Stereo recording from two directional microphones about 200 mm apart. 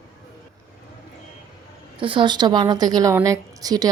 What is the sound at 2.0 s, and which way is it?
A woman's voice, 25° right (ahead or behind).